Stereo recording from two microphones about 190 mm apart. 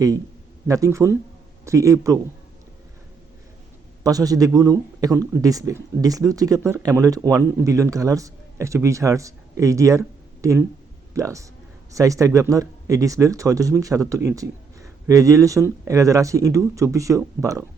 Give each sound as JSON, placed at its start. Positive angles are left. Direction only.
{"t": 0.7, "sound": "speech", "side_deg": -15}
{"t": 4.0, "sound": "speech", "side_deg": -20}